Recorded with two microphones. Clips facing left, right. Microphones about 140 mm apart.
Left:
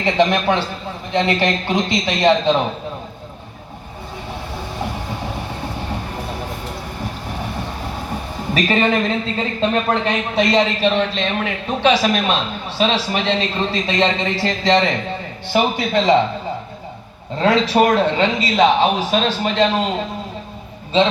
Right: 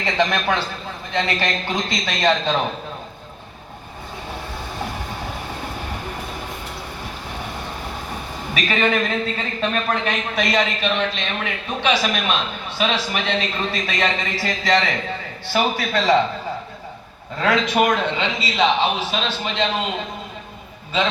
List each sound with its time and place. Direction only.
0.0 s speech: 25° left (ahead or behind)
8.5 s speech: 30° left (ahead or behind)
17.3 s speech: 30° left (ahead or behind)